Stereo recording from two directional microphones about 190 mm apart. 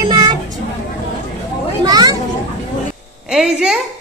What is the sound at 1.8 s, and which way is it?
Speech, 20° right (ahead or behind).